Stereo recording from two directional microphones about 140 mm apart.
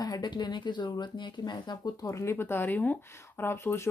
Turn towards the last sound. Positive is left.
turn(degrees=15)  # may be behind; listen again after turning